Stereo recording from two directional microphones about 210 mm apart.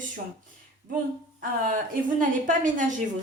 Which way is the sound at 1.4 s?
40° right (ahead or behind).